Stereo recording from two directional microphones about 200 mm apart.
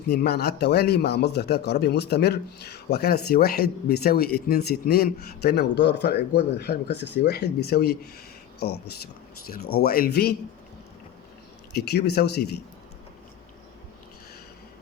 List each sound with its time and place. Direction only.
0.1 s a man's voice: 55° left (ahead or behind)
9.8 s speech: 50° left (ahead or behind)
11.7 s speech: 55° left (ahead or behind)